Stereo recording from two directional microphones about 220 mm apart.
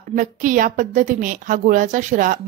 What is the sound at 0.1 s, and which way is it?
A woman's voice, 35° right (ahead or behind).